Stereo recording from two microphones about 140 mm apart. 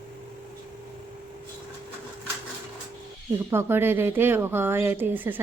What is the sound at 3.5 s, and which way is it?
Speech, 15° right (ahead or behind).